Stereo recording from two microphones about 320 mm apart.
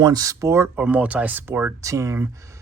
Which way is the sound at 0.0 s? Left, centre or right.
Centre.